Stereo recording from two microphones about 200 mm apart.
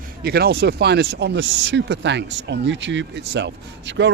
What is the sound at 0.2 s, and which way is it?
A man's voice, 50° right (ahead or behind).